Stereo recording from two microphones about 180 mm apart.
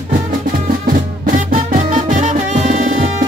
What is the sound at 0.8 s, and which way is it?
Music, 45° right (ahead or behind).